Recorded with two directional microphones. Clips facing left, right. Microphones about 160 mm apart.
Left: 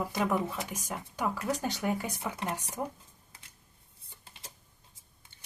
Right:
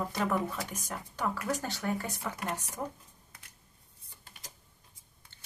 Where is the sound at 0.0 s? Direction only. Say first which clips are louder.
Left 1 dB; 10° left (ahead or behind).